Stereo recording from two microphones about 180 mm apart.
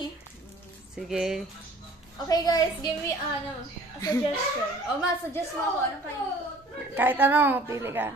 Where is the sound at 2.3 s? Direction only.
20° left (ahead or behind).